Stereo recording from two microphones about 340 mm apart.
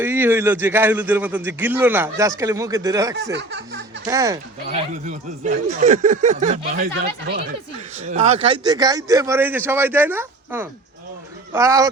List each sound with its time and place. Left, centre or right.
0.0 s a man's voice: centre
3.3 s speech: right
4.0 s a man's voice: centre
5.0 s speech: right
7.9 s a man's voice: right